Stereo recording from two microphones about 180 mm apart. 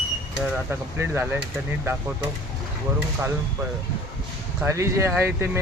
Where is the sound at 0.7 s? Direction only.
15° right (ahead or behind).